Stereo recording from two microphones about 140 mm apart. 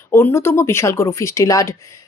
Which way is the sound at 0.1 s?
20° left (ahead or behind).